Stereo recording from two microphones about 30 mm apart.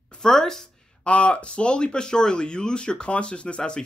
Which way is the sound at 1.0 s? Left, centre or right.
Left.